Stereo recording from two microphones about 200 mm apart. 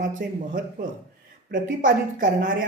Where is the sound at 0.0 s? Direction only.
40° right (ahead or behind).